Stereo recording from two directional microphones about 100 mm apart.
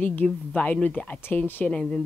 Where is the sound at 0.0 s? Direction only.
15° left (ahead or behind).